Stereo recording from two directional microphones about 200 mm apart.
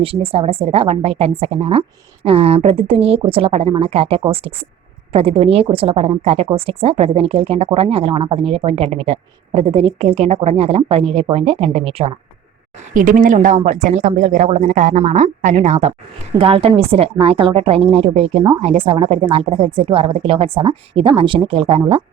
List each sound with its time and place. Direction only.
0.0 s a woman's voice: 30° right (ahead or behind)
12.9 s a woman's voice: 40° right (ahead or behind)